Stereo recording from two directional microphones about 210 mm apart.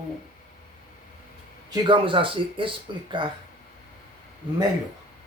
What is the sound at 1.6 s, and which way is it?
Speech, 25° right (ahead or behind).